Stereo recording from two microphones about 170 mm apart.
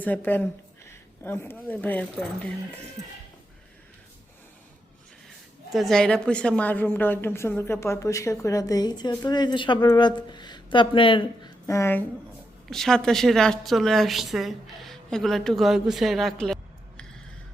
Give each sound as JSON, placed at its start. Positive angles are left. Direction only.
{"t": 0.0, "sound": "speech", "side_deg": 10}
{"t": 5.7, "sound": "a woman's voice", "side_deg": 0}
{"t": 11.6, "sound": "a woman's voice", "side_deg": 15}
{"t": 12.6, "sound": "a woman's voice", "side_deg": 0}